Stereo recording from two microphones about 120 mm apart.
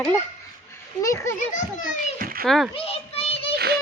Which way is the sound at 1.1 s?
25° left (ahead or behind).